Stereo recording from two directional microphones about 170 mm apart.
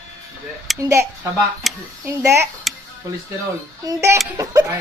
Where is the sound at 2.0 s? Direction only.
15° right (ahead or behind).